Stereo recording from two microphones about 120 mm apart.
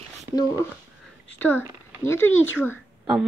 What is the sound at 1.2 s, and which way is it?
Speech, 15° left (ahead or behind).